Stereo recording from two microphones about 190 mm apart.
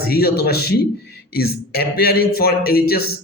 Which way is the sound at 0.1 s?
55° left (ahead or behind).